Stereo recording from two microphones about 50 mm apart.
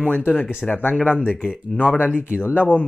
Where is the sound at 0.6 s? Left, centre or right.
Left.